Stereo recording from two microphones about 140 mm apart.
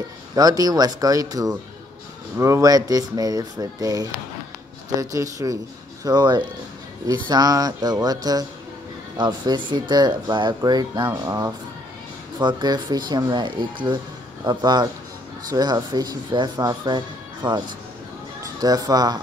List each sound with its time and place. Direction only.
0.4 s speech: 25° right (ahead or behind)
11.2 s speech: 20° right (ahead or behind)
12.4 s speech: 35° right (ahead or behind)